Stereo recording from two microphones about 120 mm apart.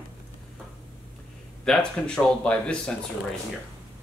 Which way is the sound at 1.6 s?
5° left (ahead or behind).